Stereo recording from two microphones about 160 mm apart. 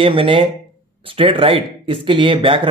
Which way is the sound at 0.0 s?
35° right (ahead or behind).